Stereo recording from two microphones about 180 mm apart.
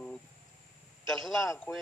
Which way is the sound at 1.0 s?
Centre (ahead or behind).